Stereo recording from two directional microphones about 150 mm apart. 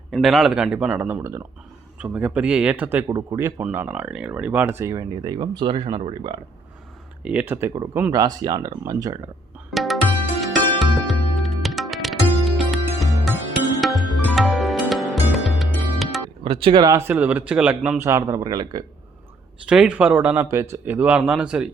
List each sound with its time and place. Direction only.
0.1 s speech: centre (ahead or behind); by 6.4 s 35° right (ahead or behind)
7.2 s speech: 10° right (ahead or behind)
8.1 s speech: 25° right (ahead or behind)
9.7 s tabla: centre (ahead or behind)
10.4 s music: centre (ahead or behind)
16.4 s speech: 35° right (ahead or behind)
19.6 s speech: 5° right (ahead or behind)